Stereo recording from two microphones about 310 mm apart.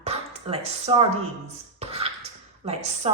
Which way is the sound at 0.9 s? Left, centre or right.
Centre.